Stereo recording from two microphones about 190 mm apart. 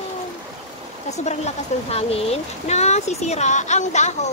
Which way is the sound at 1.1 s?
35° left (ahead or behind).